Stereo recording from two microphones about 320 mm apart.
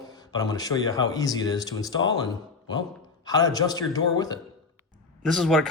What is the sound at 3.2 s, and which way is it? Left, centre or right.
Speech, centre.